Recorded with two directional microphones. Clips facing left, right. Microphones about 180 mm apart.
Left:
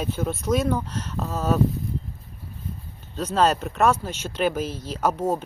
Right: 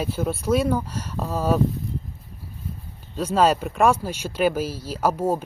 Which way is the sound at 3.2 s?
10° right (ahead or behind).